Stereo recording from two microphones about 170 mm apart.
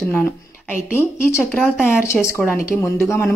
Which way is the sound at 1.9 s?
15° left (ahead or behind).